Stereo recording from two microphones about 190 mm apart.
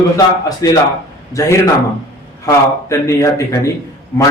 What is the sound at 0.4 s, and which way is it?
Speech, 20° left (ahead or behind).